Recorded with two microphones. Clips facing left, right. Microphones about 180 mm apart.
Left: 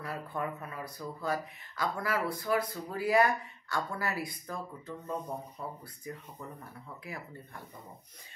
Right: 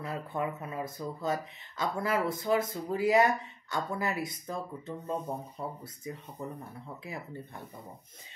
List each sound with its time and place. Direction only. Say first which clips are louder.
0.0 s speech: right 2 dB; 25° right (ahead or behind)
6.6 s speech: right 3 dB; 25° right (ahead or behind)